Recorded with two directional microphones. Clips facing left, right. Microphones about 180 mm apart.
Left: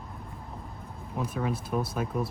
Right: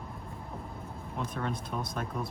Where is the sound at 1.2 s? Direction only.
5° left (ahead or behind).